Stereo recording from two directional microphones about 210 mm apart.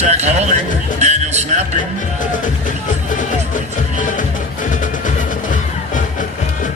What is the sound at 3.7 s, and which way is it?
Music, 40° left (ahead or behind).